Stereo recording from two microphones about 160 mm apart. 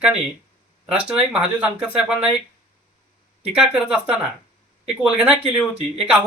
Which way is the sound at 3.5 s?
5° right (ahead or behind).